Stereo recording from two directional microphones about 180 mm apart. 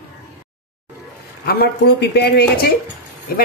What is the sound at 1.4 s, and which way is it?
Speech, 60° left (ahead or behind).